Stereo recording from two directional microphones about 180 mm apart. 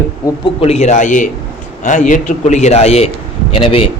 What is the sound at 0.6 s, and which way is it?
A man's voice, 35° left (ahead or behind).